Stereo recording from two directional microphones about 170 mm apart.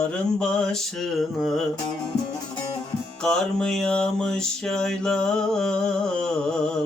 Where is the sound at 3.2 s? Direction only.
5° left (ahead or behind).